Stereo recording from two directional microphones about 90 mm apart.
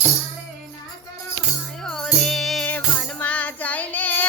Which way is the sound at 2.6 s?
15° left (ahead or behind).